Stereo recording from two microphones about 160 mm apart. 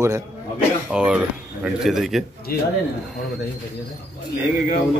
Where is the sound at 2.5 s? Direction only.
70° left (ahead or behind).